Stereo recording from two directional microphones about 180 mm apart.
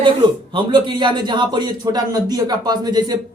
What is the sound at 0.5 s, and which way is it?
Speech, 25° right (ahead or behind).